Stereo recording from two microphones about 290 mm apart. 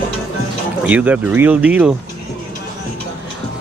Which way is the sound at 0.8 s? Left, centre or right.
Centre.